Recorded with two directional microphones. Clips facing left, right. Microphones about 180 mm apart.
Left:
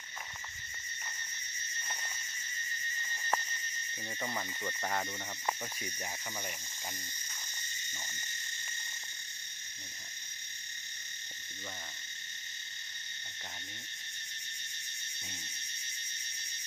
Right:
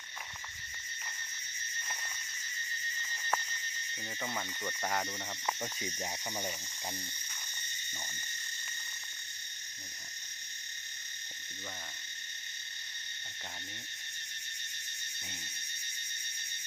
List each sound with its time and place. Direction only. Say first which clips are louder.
1.9 s a sound: left 1 dB; 5° left (ahead or behind)
4.0 s speech: even; centre (ahead or behind)
5.8 s cricket: right 3 dB; 15° right (ahead or behind)
6.2 s speech: right 4 dB; 20° right (ahead or behind)